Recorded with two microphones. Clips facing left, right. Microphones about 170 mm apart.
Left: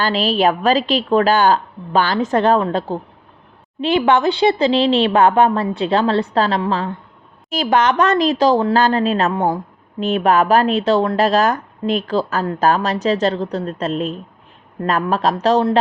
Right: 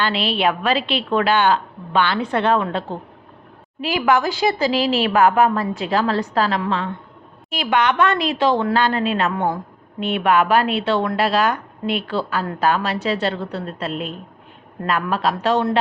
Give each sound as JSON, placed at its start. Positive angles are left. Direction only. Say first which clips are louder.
{"t": 0.0, "sound": "a woman's voice", "louder": "left 4 dB", "side_deg": 40}
{"t": 3.8, "sound": "a woman's voice", "louder": "left 3 dB", "side_deg": 30}